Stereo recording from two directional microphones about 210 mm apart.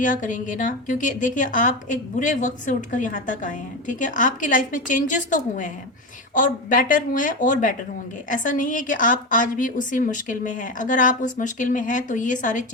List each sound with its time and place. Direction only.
0.0 s a woman's voice: 40° left (ahead or behind)